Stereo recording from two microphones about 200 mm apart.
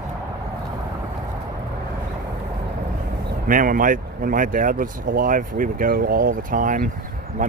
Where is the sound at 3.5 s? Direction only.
45° right (ahead or behind).